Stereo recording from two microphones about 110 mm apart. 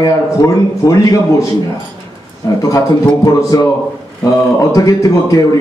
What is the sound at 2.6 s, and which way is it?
A man's voice, 30° left (ahead or behind).